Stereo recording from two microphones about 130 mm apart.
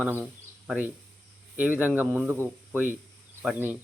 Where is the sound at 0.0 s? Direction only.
10° right (ahead or behind).